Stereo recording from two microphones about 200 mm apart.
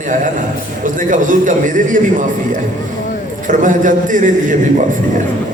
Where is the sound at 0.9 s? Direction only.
40° right (ahead or behind).